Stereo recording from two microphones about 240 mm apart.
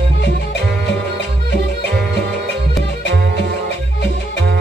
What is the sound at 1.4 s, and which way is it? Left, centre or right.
Music, right.